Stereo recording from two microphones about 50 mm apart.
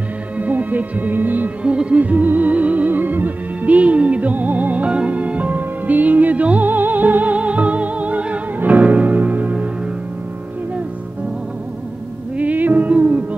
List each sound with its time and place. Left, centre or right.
0.4 s music: right
1.6 s music: right
12.4 s music: right